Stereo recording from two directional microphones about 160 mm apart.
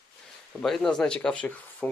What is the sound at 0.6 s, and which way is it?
Speech, centre (ahead or behind).